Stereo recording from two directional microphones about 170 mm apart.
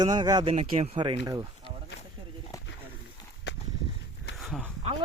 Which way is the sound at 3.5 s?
90° left.